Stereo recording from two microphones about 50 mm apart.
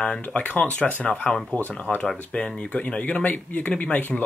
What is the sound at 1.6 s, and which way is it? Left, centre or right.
Speech, left.